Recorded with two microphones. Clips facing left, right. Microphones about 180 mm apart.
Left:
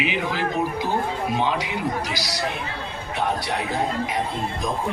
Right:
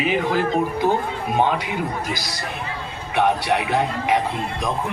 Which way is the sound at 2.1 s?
50° right (ahead or behind).